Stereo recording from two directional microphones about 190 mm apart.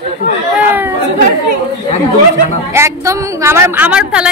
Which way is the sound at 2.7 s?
15° right (ahead or behind).